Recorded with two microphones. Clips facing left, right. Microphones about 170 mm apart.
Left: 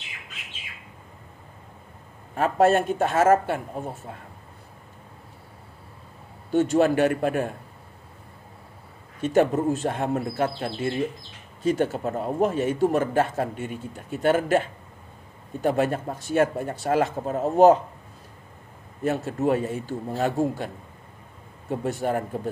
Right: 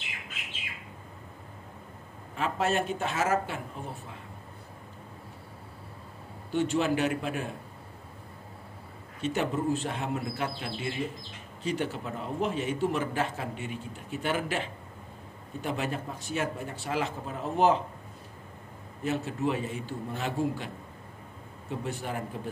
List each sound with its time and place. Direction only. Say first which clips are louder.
2.3 s a man's voice: left 9 dB; 50° left (ahead or behind)
6.5 s a man's voice: left 7 dB; 45° left (ahead or behind)
9.2 s a man's voice: left 8 dB; 50° left (ahead or behind)
19.0 s a man's voice: left 6 dB; 45° left (ahead or behind)